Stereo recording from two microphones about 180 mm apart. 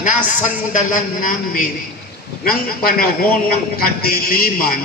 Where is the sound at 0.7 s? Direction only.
45° left (ahead or behind).